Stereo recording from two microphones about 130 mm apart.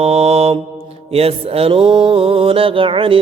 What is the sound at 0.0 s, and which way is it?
Mantra, 55° right (ahead or behind).